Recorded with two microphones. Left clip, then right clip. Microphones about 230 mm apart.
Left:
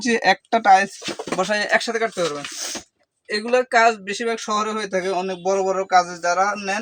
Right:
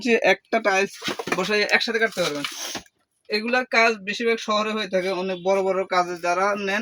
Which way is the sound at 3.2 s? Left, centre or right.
Left.